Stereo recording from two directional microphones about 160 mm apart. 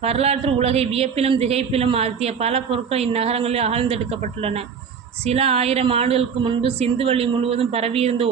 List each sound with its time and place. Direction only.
0.0 s speech: 40° right (ahead or behind)